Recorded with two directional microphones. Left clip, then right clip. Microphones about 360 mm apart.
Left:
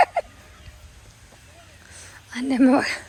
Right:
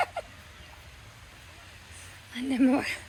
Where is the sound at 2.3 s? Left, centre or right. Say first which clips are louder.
Left 7 dB; centre.